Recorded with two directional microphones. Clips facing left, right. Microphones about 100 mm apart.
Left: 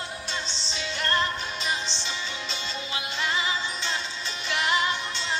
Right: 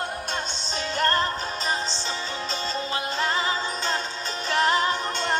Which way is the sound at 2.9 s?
40° right (ahead or behind).